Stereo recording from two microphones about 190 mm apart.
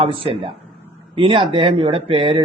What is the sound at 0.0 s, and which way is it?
Speech, 30° right (ahead or behind).